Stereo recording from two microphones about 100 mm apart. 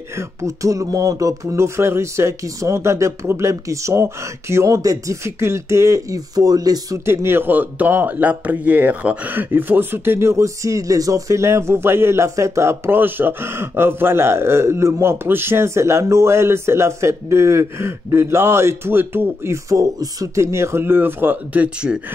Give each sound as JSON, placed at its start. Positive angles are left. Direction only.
{"t": 0.1, "sound": "speech", "side_deg": -30}
{"t": 7.1, "sound": "speech", "side_deg": -25}
{"t": 21.8, "sound": "speech", "side_deg": -10}